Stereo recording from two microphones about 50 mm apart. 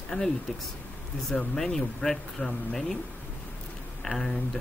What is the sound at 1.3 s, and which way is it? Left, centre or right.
Speech, centre.